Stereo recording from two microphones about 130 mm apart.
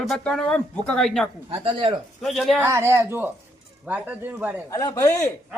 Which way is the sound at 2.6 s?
20° right (ahead or behind).